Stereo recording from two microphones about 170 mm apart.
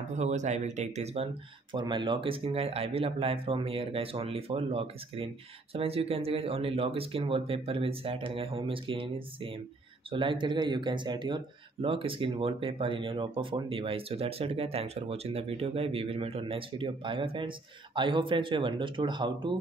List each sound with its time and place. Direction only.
0.1 s speech: 45° right (ahead or behind); by 19.5 s 30° right (ahead or behind)